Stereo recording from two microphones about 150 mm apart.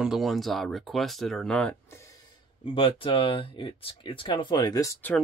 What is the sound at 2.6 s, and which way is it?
Speech, 35° left (ahead or behind).